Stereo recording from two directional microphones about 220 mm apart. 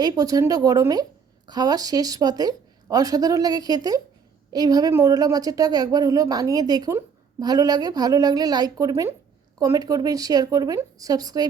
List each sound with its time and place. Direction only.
0.0 s a woman's voice: 15° right (ahead or behind)